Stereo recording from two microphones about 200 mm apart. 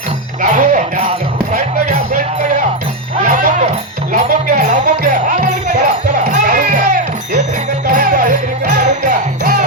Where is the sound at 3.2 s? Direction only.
40° right (ahead or behind).